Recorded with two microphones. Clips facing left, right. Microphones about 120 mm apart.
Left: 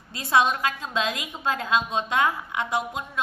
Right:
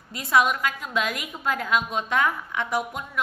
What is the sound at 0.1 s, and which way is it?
A woman's voice, 25° left (ahead or behind).